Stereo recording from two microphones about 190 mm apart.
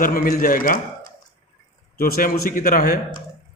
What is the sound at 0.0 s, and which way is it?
Speech, 50° left (ahead or behind).